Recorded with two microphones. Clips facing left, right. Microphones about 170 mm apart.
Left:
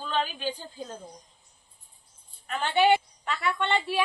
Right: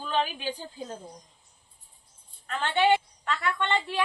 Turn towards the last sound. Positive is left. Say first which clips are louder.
# left 1 dB
turn(degrees=15)  # may be behind; listen again after turning